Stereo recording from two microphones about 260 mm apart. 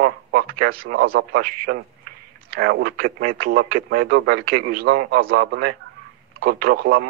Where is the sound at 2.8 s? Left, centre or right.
Right.